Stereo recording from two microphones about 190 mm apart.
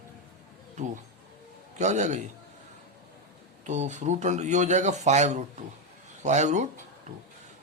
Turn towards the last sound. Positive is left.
turn(degrees=-40)  # may be behind; listen again after turning